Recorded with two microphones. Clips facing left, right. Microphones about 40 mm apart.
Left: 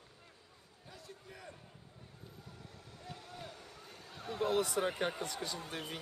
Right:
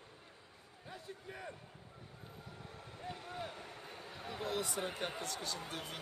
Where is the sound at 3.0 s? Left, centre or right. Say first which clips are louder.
Right 5 dB; right.